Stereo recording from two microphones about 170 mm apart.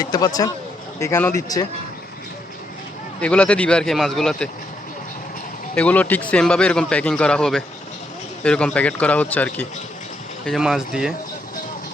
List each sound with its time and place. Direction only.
0.0 s speech: 20° left (ahead or behind)
3.2 s speech: 10° left (ahead or behind)
5.7 s speech: 10° left (ahead or behind)